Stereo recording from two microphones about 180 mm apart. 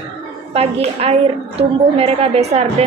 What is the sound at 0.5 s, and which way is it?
A woman's voice, 35° right (ahead or behind).